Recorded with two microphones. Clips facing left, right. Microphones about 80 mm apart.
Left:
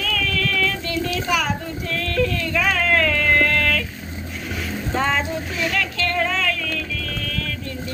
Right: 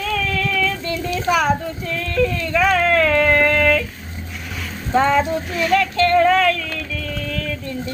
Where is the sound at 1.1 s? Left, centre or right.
Right.